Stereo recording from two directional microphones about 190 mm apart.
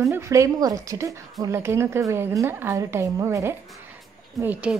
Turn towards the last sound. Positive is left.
turn(degrees=-10)  # may be behind; listen again after turning